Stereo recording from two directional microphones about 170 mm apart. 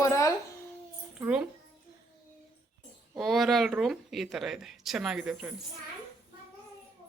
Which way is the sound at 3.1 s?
Centre (ahead or behind).